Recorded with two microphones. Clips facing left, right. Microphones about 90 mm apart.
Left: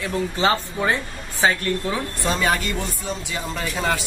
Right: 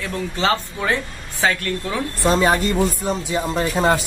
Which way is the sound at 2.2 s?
25° right (ahead or behind).